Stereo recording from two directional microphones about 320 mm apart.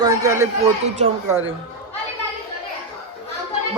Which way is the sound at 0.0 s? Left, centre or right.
Centre.